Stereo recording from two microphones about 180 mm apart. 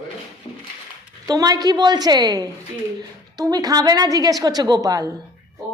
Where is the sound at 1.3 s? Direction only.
20° right (ahead or behind).